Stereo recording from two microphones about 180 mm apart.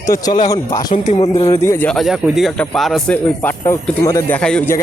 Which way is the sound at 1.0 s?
30° left (ahead or behind).